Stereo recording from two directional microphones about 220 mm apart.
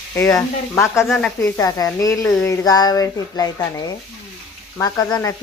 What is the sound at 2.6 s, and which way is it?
A woman's voice, 15° left (ahead or behind).